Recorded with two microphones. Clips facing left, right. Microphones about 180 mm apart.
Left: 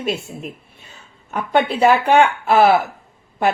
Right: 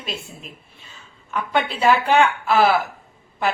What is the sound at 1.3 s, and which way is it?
Speech, 50° left (ahead or behind).